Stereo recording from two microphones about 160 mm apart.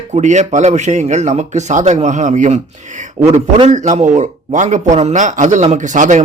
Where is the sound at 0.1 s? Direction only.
45° right (ahead or behind).